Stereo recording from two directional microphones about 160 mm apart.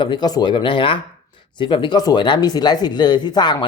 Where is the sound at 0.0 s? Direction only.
30° left (ahead or behind).